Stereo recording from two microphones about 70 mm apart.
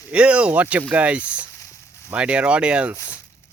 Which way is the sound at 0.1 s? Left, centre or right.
Centre.